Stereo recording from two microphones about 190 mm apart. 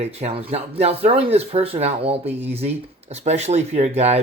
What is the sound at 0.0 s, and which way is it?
Speech, 35° right (ahead or behind).